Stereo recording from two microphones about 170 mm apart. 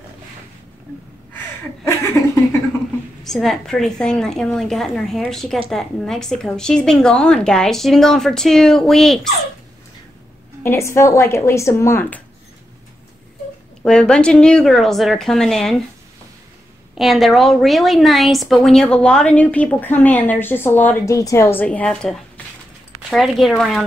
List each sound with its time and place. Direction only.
3.3 s a woman's voice: centre (ahead or behind)
10.6 s speech: 15° left (ahead or behind)
13.8 s a woman's voice: 5° left (ahead or behind)
16.9 s a woman's voice: centre (ahead or behind)